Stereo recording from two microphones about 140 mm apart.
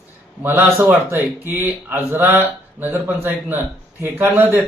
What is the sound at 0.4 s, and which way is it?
Speech, 15° right (ahead or behind).